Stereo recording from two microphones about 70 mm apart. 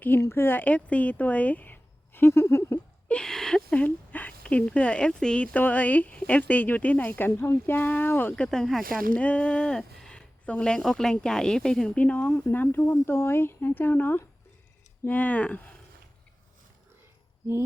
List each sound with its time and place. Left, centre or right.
0.2 s speech: left
3.1 s speech: centre; by 8.4 s left
8.4 s speech: centre
9.1 s a sound: centre
10.4 s speech: centre
11.9 s speech: left